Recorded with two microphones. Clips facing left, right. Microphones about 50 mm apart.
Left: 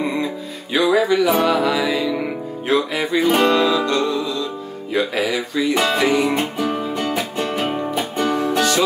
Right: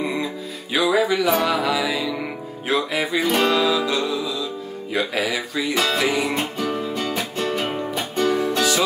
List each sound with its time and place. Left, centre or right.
0.7 s music: centre
5.8 s music: centre
6.0 s music: centre
6.6 s music: centre